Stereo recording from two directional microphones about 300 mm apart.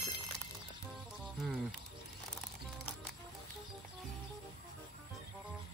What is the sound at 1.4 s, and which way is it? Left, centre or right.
Speech, centre.